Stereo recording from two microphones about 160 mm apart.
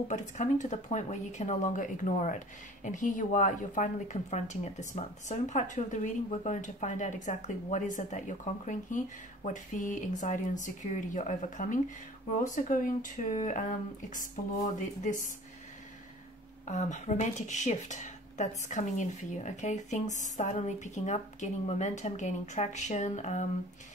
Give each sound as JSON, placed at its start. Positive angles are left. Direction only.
{"t": 0.1, "sound": "speech", "side_deg": 50}
{"t": 16.6, "sound": "speech", "side_deg": 50}